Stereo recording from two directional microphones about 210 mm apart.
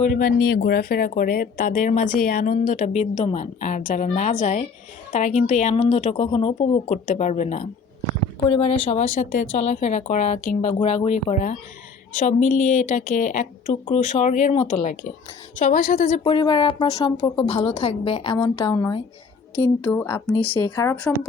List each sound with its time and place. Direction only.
0.0 s speech: 40° left (ahead or behind)
16.2 s a woman's voice: 20° left (ahead or behind)